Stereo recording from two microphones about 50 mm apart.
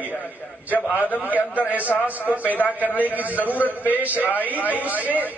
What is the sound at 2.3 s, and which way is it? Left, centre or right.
A man's voice, right.